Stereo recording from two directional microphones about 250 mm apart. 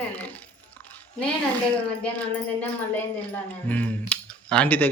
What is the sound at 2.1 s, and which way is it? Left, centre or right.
Speech, centre.